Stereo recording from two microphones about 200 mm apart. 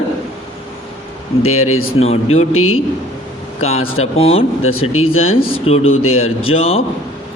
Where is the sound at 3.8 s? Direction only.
90° left.